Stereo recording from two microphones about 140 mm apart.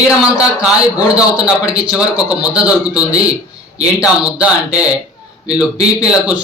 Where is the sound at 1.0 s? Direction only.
10° right (ahead or behind).